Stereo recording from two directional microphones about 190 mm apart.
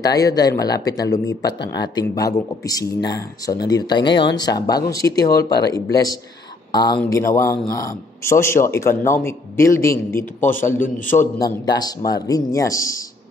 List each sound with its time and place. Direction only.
0.0 s a man's voice: 20° left (ahead or behind)
11.1 s speech: 30° left (ahead or behind)